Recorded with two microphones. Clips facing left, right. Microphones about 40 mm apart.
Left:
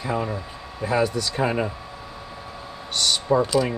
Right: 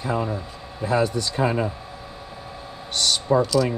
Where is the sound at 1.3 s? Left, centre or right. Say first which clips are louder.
Right 1 dB; left.